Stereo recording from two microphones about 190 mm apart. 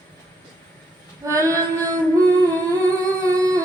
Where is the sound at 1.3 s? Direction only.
15° right (ahead or behind).